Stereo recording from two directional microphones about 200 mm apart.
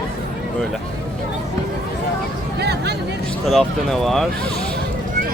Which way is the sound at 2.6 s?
55° right (ahead or behind).